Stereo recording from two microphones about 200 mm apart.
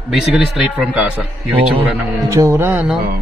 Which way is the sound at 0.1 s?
Centre (ahead or behind).